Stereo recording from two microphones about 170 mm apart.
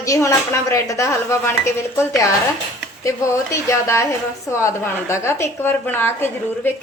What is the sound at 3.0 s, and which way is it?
A woman's voice, 15° left (ahead or behind).